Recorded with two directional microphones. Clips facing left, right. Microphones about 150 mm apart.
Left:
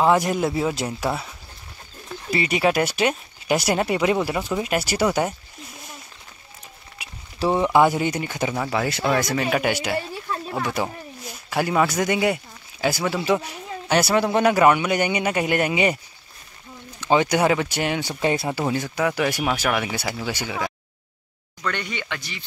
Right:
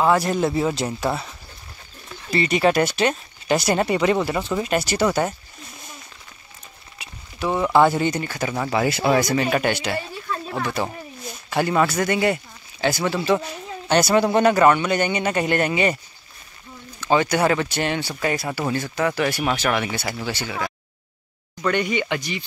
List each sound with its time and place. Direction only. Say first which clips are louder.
0.0 s speech: even; 15° left (ahead or behind)
2.3 s speech: right 2 dB; 10° left (ahead or behind)
7.3 s speech: even; 25° left (ahead or behind)
7.8 s speech: right 1 dB; 10° left (ahead or behind)
8.6 s speech: right 6 dB; 10° right (ahead or behind); by 16.0 s 15° left (ahead or behind)
17.0 s speech: even; 15° left (ahead or behind)
18.2 s speech: left 3 dB; 25° left (ahead or behind)
21.6 s speech: right 7 dB; 15° right (ahead or behind)